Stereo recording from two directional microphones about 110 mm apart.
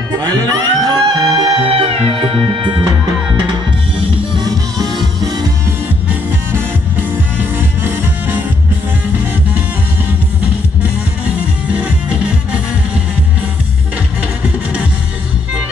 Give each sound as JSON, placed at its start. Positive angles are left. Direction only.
{"t": 0.2, "sound": "music", "side_deg": -35}
{"t": 4.4, "sound": "music", "side_deg": -35}
{"t": 7.5, "sound": "music", "side_deg": -15}
{"t": 11.7, "sound": "music", "side_deg": -10}